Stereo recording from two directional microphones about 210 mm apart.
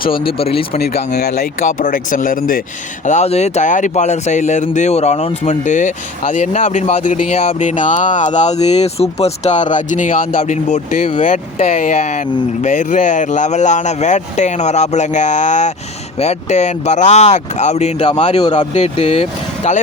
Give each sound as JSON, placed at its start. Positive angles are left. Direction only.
{"t": 0.3, "sound": "speech", "side_deg": 25}